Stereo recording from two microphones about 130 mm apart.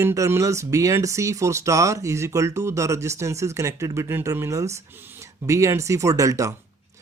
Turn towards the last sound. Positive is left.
turn(degrees=-25)  # may be behind; listen again after turning